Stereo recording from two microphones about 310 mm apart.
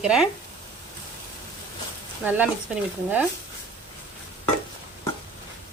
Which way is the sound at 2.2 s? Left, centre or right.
Centre.